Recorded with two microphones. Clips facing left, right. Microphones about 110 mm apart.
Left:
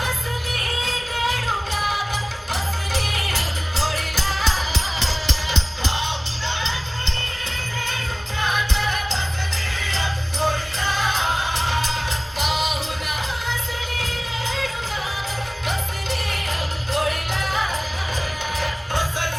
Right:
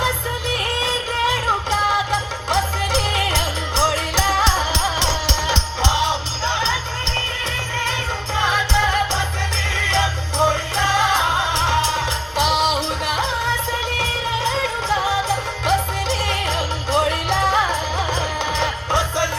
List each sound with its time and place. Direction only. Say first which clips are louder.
0.8 s music: right 3 dB; 90° right
8.4 s music: right 5 dB; 90° right